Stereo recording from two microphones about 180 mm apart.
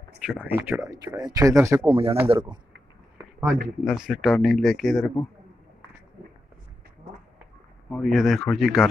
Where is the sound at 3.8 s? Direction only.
5° right (ahead or behind).